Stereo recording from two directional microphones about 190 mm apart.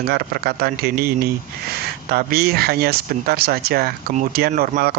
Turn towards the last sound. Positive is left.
turn(degrees=-50)  # may be behind; listen again after turning